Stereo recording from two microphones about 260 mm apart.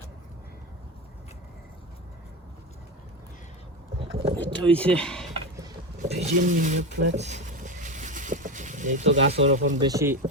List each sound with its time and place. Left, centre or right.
4.4 s speech: centre
6.0 s pigeon: right
9.8 s speech: centre